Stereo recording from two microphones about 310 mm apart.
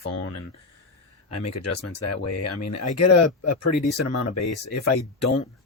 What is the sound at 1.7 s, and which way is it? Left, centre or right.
Speech, left.